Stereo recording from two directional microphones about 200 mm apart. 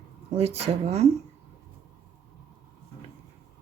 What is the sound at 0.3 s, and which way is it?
Speech, 30° right (ahead or behind).